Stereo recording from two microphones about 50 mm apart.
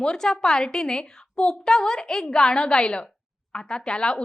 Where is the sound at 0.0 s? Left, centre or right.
Centre.